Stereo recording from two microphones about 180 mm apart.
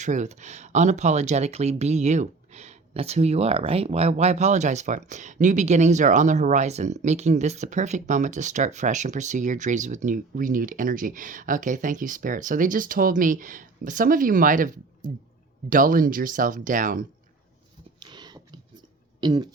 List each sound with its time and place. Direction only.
0.0 s speech: 40° right (ahead or behind)
18.0 s a sound: 25° right (ahead or behind)
19.2 s throat clearing: 25° right (ahead or behind)